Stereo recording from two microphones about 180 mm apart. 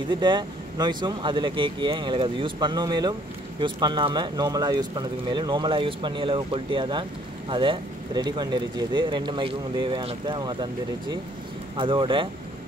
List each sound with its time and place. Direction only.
0.1 s speech: 25° right (ahead or behind)